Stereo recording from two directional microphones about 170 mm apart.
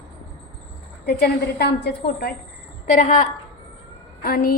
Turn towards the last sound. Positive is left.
turn(degrees=55)  # may be behind; listen again after turning